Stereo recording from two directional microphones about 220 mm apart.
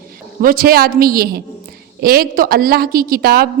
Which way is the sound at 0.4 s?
40° right (ahead or behind).